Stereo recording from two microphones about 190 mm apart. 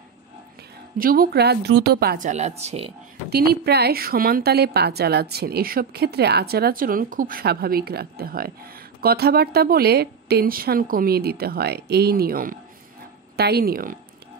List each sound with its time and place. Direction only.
0.9 s a woman's voice: 50° right (ahead or behind); by 2.9 s 35° right (ahead or behind)
3.3 s a woman's voice: 55° right (ahead or behind)